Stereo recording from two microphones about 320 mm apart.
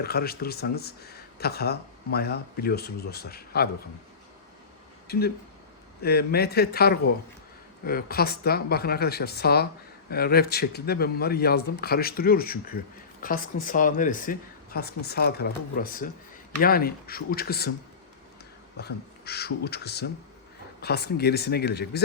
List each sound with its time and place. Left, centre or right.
0.0 s speech: left
5.1 s speech: left
18.8 s speech: left